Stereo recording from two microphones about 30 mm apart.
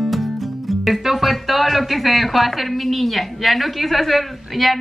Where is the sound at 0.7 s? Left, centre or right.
Centre.